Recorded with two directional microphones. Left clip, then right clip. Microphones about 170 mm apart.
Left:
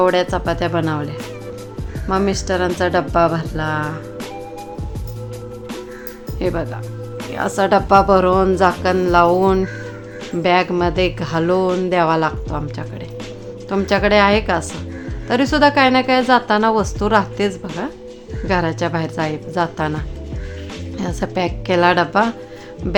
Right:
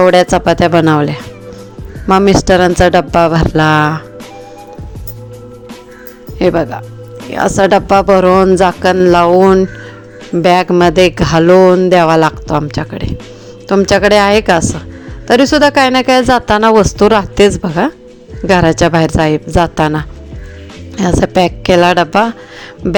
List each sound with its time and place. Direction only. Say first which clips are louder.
0.0 s speech: right 8 dB; 50° right (ahead or behind)
6.4 s speech: right 10 dB; 45° right (ahead or behind)
10.3 s speech: right 7 dB; 50° right (ahead or behind)
22.8 s music: right 6 dB; 35° right (ahead or behind)